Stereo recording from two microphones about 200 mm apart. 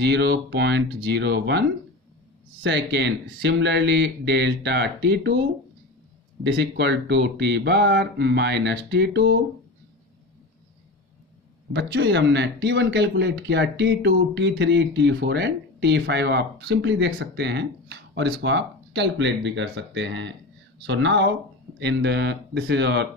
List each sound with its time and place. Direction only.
0.0 s speech: 60° right (ahead or behind)
2.6 s speech: 60° right (ahead or behind)
6.4 s speech: 60° right (ahead or behind)
11.7 s speech: 60° right (ahead or behind)